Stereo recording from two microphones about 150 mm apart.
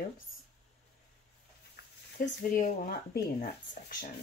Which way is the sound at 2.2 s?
70° left (ahead or behind).